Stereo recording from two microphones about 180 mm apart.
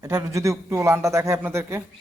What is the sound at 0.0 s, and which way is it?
A man's voice, 20° right (ahead or behind).